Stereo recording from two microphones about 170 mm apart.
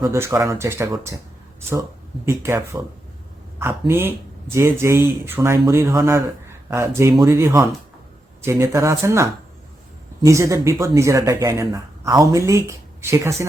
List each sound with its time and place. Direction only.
0.0 s speech: 15° right (ahead or behind)
2.2 s speech: 15° right (ahead or behind)
10.2 s speech: 20° right (ahead or behind)